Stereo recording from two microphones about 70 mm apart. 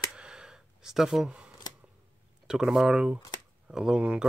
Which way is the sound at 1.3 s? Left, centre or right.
Centre.